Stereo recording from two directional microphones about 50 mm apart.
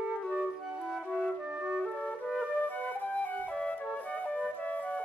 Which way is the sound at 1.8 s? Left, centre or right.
Left.